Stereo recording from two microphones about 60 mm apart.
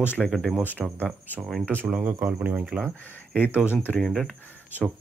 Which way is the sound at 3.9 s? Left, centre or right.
Centre.